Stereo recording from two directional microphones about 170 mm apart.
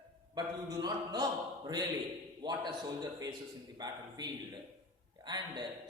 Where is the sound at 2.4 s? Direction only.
25° right (ahead or behind).